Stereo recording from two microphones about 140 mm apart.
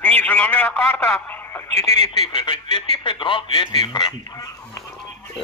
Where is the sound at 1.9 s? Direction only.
35° left (ahead or behind); by 5.4 s 20° left (ahead or behind).